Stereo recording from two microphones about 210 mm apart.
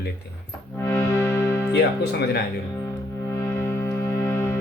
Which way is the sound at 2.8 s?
15° left (ahead or behind).